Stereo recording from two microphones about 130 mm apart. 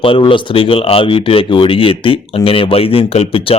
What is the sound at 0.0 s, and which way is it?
A man's voice, 45° left (ahead or behind).